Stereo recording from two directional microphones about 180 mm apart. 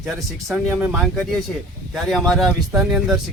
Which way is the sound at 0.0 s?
Centre (ahead or behind).